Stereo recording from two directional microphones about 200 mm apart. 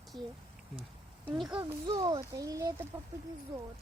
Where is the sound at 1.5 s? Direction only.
20° right (ahead or behind).